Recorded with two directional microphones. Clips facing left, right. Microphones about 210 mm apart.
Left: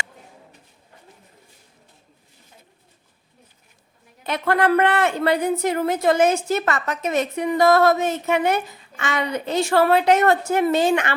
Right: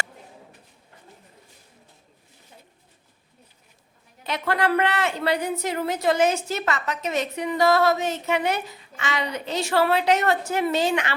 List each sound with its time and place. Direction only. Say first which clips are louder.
4.2 s a woman's voice: left 4 dB; 50° left (ahead or behind)